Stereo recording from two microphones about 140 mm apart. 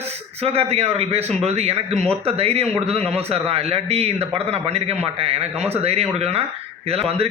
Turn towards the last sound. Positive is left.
turn(degrees=-45)  # may be behind; listen again after turning